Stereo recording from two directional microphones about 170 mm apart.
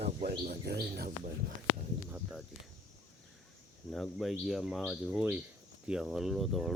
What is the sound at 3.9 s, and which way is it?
Speech, centre (ahead or behind).